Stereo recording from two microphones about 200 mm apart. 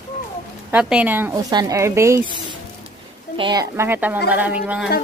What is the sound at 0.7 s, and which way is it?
Speech, 5° right (ahead or behind).